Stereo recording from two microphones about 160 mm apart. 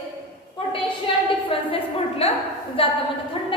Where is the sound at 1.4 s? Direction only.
35° left (ahead or behind).